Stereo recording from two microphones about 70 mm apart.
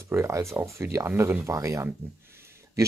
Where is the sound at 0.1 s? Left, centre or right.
Right.